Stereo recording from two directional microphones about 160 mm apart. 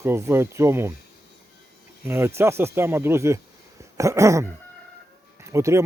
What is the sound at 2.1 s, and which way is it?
Speech, 15° right (ahead or behind).